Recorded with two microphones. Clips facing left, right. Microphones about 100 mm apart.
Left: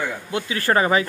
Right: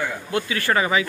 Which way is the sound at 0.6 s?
40° left (ahead or behind).